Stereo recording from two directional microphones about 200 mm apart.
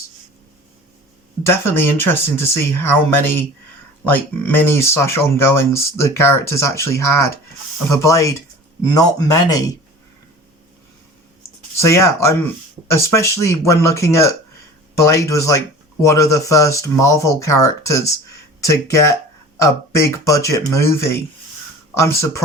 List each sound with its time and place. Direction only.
1.5 s speech: 10° left (ahead or behind)
11.8 s speech: 15° left (ahead or behind)